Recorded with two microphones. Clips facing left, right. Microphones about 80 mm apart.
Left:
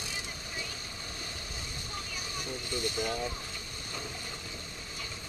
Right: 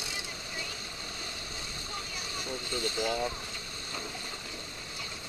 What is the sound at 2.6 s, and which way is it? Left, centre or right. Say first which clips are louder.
Speech: right 1 dB; centre.